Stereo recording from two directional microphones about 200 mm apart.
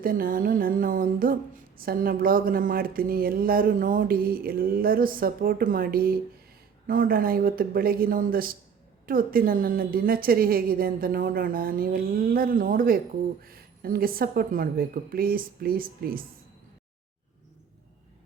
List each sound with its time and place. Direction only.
0.0 s speech: 45° right (ahead or behind)